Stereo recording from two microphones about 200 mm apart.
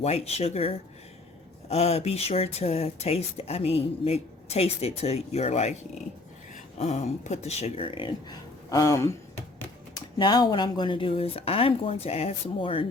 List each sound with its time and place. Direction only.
0.0 s speech: 30° left (ahead or behind)